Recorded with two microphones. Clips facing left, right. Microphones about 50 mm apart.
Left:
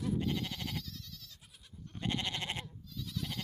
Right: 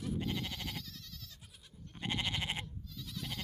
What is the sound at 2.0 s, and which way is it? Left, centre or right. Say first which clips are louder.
Sheep: even; centre.